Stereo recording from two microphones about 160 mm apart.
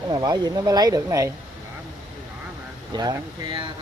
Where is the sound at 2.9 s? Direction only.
25° right (ahead or behind).